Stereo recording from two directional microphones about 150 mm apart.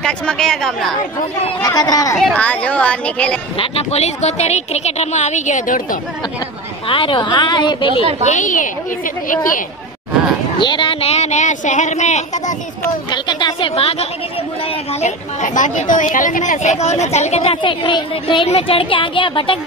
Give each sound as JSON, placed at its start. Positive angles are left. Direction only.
{"t": 0.0, "sound": "a woman's voice", "side_deg": 5}
{"t": 1.6, "sound": "speech", "side_deg": 25}
{"t": 2.1, "sound": "speech", "side_deg": 5}
{"t": 3.5, "sound": "a woman's voice", "side_deg": 40}
{"t": 6.9, "sound": "a woman's voice", "side_deg": 35}
{"t": 8.2, "sound": "speech", "side_deg": 55}
{"t": 10.6, "sound": "a woman's voice", "side_deg": 30}
{"t": 13.1, "sound": "a sound", "side_deg": 30}
{"t": 15.0, "sound": "a woman's voice", "side_deg": 55}